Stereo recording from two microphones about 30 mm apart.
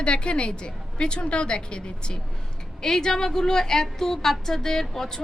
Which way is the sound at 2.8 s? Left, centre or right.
Centre.